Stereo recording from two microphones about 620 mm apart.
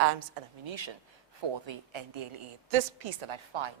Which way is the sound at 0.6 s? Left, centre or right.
Right.